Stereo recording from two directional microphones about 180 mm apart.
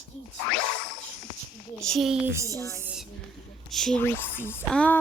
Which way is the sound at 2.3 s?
15° right (ahead or behind).